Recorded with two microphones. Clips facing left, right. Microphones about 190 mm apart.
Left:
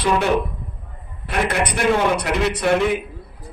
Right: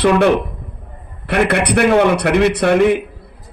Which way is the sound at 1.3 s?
65° right (ahead or behind).